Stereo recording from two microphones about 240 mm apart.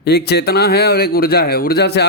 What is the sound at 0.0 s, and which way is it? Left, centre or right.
Speech, left.